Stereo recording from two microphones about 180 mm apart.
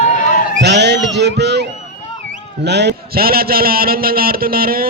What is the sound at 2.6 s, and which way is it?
A man's voice, 70° right (ahead or behind).